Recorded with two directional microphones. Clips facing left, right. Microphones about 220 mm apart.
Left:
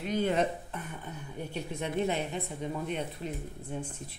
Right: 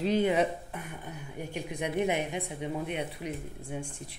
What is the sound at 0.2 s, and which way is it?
Speech, 10° right (ahead or behind).